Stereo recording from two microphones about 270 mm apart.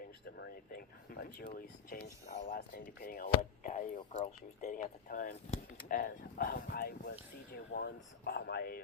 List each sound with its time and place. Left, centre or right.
0.3 s speech: left